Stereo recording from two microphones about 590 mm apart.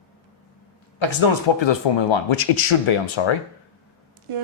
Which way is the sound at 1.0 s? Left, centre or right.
Left.